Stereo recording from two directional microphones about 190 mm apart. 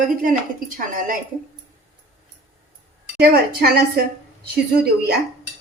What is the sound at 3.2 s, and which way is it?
A woman's voice, 55° right (ahead or behind).